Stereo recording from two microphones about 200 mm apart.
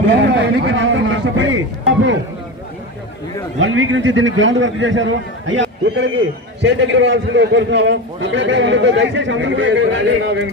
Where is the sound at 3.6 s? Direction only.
75° right (ahead or behind).